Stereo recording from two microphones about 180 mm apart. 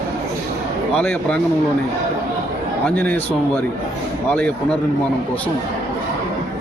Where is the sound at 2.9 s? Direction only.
10° left (ahead or behind).